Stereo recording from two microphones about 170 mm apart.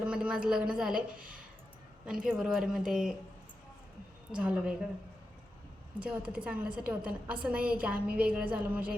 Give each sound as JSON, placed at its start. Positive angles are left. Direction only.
{"t": 0.0, "sound": "a woman's voice", "side_deg": -5}
{"t": 1.1, "sound": "speech", "side_deg": -55}
{"t": 2.2, "sound": "a woman's voice", "side_deg": 0}
{"t": 4.4, "sound": "a woman's voice", "side_deg": -5}
{"t": 6.0, "sound": "a woman's voice", "side_deg": -5}